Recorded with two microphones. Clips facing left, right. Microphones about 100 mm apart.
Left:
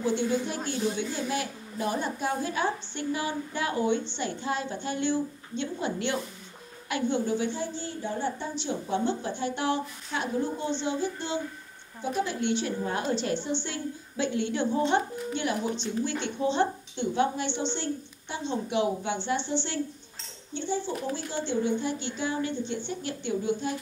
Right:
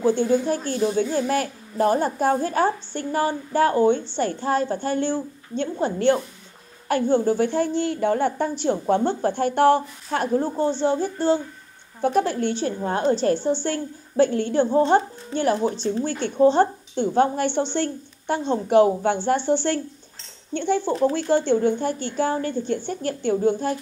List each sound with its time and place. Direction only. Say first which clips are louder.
0.0 s a woman's voice: right 7 dB; 40° right (ahead or behind)
12.0 s a woman's voice: right 8 dB; 55° right (ahead or behind)
20.5 s a woman's voice: right 8 dB; 60° right (ahead or behind)